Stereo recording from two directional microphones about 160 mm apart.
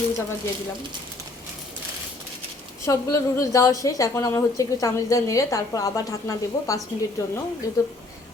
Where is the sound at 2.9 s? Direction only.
20° left (ahead or behind).